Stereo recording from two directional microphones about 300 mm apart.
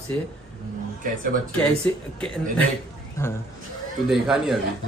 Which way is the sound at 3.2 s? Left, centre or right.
Centre.